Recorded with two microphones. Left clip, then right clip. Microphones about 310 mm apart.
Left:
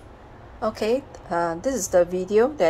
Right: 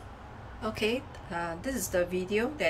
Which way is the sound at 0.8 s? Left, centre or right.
Centre.